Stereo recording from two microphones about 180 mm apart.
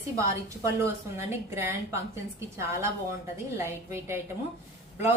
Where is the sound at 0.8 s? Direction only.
15° right (ahead or behind).